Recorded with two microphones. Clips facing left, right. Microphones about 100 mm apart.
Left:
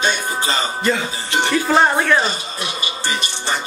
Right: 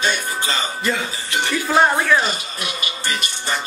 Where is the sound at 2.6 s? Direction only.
25° left (ahead or behind).